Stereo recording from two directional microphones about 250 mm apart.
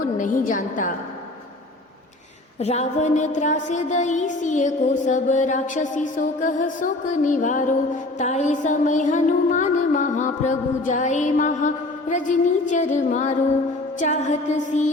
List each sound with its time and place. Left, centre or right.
0.2 s a woman's voice: left
2.6 s music: left